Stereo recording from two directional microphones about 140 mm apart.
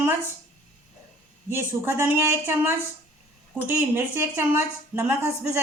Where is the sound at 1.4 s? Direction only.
15° right (ahead or behind).